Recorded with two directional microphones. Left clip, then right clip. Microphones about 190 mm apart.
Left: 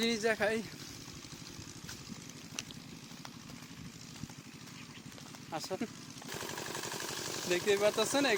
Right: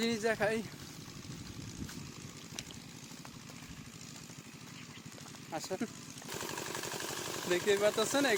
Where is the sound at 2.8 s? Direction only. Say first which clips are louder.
Left 1 dB; 60° right (ahead or behind).